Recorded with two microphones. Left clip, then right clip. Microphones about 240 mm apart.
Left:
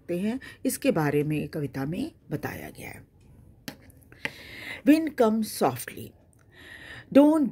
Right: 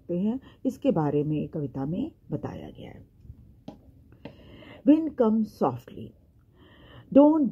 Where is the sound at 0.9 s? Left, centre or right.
Left.